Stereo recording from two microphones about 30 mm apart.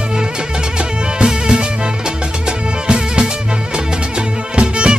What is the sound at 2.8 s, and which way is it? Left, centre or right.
Music, right.